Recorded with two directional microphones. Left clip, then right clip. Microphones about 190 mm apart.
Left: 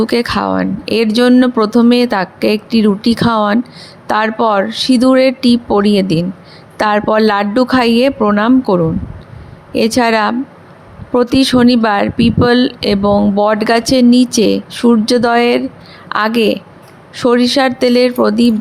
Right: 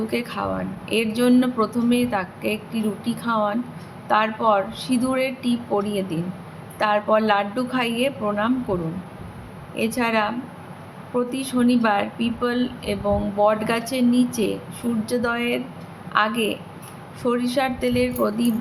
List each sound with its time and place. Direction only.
0.1 s speech: 50° left (ahead or behind)